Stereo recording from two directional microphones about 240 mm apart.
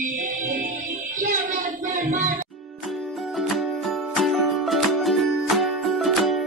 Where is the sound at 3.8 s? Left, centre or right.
Centre.